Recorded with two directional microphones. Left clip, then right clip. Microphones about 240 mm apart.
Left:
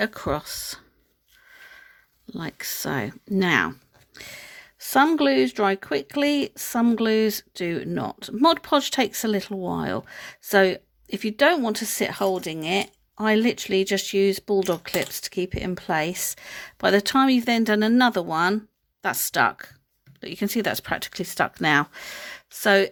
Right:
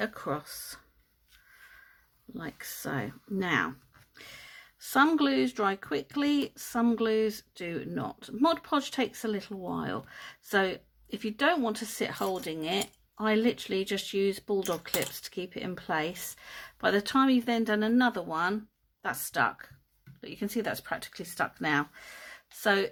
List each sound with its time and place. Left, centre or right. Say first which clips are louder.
0.0 s speech: left 7 dB; left
2.3 s speech: left 8 dB; left